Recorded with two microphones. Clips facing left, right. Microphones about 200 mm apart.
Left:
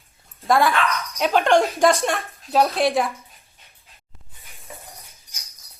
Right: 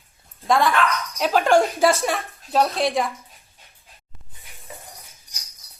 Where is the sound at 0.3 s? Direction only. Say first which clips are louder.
Even; centre (ahead or behind).